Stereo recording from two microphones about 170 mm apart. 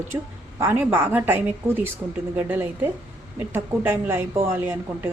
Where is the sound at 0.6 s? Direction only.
15° right (ahead or behind).